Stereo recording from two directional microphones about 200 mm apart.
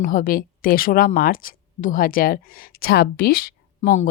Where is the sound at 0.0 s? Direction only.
45° left (ahead or behind).